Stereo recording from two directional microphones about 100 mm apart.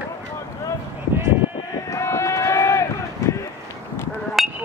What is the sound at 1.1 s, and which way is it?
Sheep, 25° right (ahead or behind).